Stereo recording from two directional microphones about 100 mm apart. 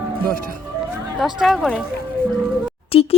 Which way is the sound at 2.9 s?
70° left (ahead or behind).